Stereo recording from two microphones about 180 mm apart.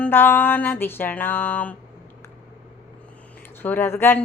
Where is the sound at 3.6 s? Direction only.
10° left (ahead or behind).